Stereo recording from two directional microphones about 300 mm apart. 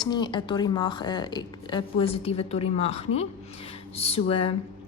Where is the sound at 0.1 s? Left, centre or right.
Centre.